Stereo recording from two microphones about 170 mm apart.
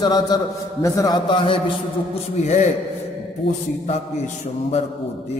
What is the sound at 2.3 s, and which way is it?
Speech, 45° left (ahead or behind).